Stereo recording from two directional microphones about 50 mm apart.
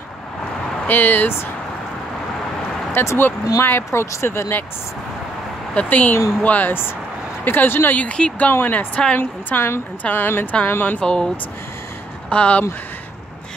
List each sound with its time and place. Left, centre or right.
0.8 s speech: left
2.9 s speech: left
5.8 s speech: left
7.4 s a woman's voice: left
7.9 s speech: left
8.5 s a woman's voice: left
11.0 s speech: centre